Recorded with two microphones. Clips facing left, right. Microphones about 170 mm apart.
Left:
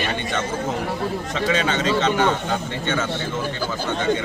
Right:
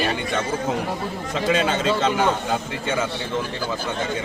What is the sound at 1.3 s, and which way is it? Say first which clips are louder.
A man's voice: right 2 dB; 5° right (ahead or behind).